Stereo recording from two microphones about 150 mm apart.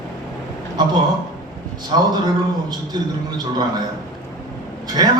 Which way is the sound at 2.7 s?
25° right (ahead or behind).